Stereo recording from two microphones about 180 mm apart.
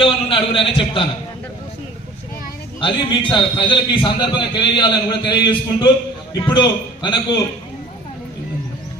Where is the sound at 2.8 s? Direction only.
30° left (ahead or behind).